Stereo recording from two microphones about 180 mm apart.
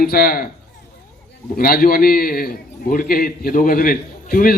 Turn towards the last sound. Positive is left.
turn(degrees=50)  # may be behind; listen again after turning